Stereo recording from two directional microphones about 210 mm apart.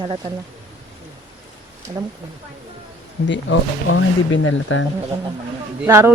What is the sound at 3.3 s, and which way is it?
Speech, 60° left (ahead or behind).